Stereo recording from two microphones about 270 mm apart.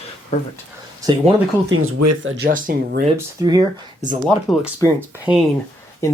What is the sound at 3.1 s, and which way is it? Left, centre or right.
Speech, centre.